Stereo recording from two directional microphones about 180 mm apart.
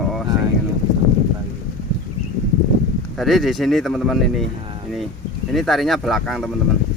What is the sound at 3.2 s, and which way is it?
Speech, centre (ahead or behind).